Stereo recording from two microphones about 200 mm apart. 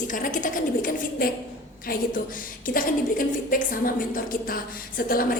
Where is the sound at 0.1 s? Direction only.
40° left (ahead or behind).